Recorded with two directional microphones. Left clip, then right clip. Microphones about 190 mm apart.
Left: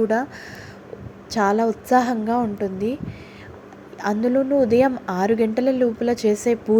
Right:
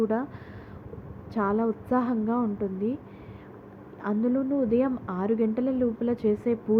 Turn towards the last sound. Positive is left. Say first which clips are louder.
# left 7 dB
turn(degrees=15)  # may be behind; listen again after turning